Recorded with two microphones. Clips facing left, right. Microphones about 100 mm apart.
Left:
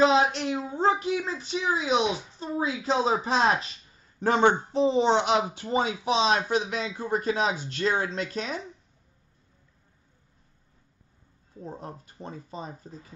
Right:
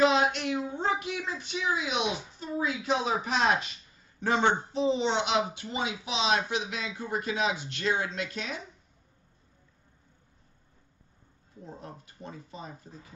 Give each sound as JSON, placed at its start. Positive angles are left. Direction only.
{"t": 0.0, "sound": "a man's voice", "side_deg": 30}
{"t": 4.2, "sound": "a man's voice", "side_deg": 45}
{"t": 11.6, "sound": "a man's voice", "side_deg": 35}